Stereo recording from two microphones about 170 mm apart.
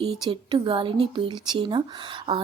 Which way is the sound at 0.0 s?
35° right (ahead or behind).